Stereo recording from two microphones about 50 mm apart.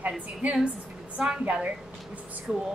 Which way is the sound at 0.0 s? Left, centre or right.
Right.